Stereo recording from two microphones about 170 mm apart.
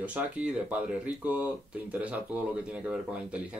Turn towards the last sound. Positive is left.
turn(degrees=-10)  # may be behind; listen again after turning